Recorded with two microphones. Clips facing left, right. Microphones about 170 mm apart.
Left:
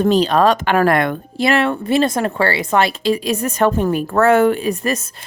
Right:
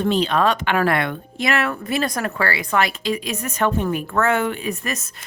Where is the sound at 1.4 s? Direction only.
30° left (ahead or behind).